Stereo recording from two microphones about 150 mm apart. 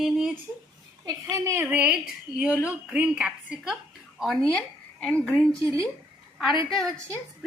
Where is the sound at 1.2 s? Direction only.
15° right (ahead or behind).